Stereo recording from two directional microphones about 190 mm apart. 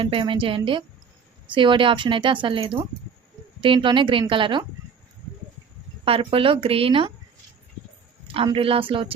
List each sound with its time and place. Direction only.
0.0 s speech: 30° right (ahead or behind)
6.1 s speech: 30° right (ahead or behind)
8.3 s speech: 30° right (ahead or behind)